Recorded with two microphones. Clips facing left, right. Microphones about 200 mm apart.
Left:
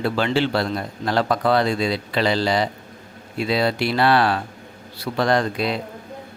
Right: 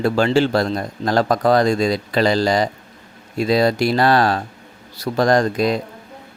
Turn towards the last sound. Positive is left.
turn(degrees=-40)  # may be behind; listen again after turning